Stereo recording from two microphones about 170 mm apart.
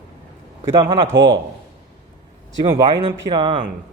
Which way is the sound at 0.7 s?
30° right (ahead or behind).